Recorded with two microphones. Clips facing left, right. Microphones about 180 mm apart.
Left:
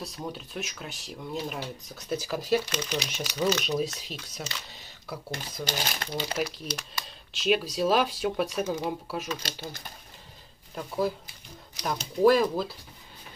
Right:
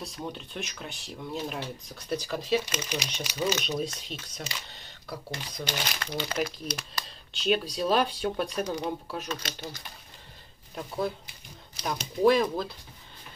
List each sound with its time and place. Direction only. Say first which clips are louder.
0.0 s speech: left 1 dB; centre (ahead or behind)
2.6 s speech: left 2 dB; 10° right (ahead or behind)
4.6 s camera: left 1 dB; 5° left (ahead or behind)
5.3 s speech: left 2 dB; 40° left (ahead or behind)
6.3 s speech: even; 5° left (ahead or behind)
10.7 s speech: left 2 dB; centre (ahead or behind)